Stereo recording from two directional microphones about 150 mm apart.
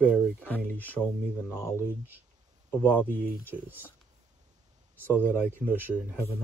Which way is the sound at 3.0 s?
65° right (ahead or behind).